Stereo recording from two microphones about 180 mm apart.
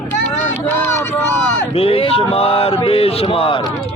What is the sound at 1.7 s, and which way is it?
Speech, 30° left (ahead or behind).